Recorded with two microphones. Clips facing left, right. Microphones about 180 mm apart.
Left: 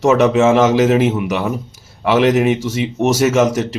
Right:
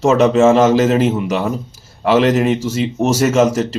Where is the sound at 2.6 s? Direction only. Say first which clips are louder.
Right 1 dB; 75° left (ahead or behind).